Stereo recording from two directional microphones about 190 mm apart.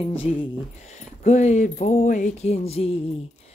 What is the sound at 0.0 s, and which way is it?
Speech, 30° left (ahead or behind).